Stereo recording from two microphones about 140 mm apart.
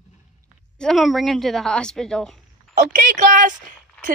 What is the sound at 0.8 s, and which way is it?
A woman's voice, centre (ahead or behind).